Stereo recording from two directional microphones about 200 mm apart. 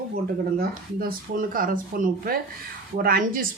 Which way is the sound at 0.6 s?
45° right (ahead or behind).